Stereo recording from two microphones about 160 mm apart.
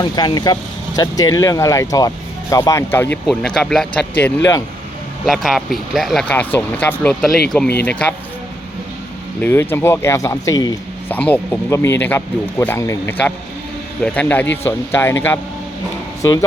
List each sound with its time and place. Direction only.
0.0 s speech: 25° left (ahead or behind)
3.2 s a man's voice: 5° left (ahead or behind)
9.4 s a man's voice: 15° left (ahead or behind)
11.1 s a man's voice: 10° left (ahead or behind)